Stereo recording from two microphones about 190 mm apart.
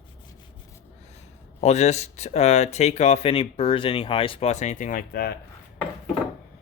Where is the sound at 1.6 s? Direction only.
35° left (ahead or behind).